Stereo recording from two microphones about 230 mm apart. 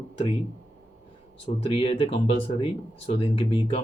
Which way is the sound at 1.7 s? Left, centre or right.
Left.